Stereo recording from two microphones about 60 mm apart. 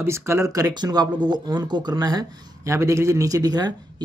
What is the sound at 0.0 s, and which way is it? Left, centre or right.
Speech, right.